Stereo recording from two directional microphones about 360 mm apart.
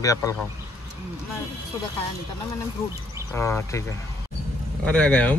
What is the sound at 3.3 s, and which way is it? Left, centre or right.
Speech, centre.